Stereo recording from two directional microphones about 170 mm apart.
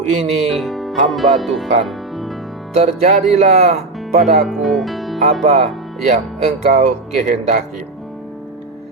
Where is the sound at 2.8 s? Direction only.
40° right (ahead or behind).